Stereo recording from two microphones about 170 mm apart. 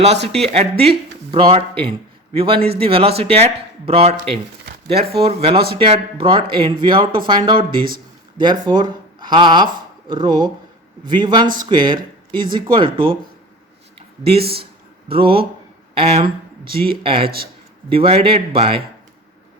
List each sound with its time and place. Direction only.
0.5 s a man's voice: 35° right (ahead or behind)
14.5 s a sound: 30° right (ahead or behind)
16.0 s a man's voice: 35° right (ahead or behind)